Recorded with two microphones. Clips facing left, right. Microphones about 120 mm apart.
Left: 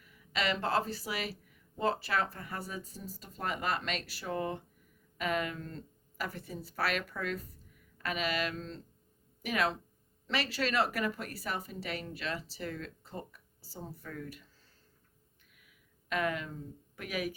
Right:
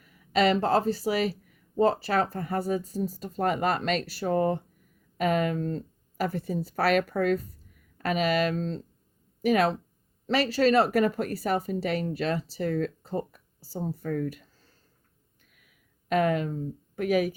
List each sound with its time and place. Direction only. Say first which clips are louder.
0.0 s speech: right 11 dB; 40° right (ahead or behind)
14.0 s speech: right 15 dB; 50° right (ahead or behind)
15.5 s a sound: right 1 dB; 45° right (ahead or behind)